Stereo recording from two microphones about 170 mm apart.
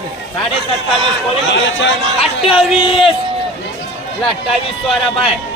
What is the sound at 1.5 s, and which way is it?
Speech, 90° left.